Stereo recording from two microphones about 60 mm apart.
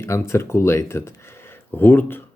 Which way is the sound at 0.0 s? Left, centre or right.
Left.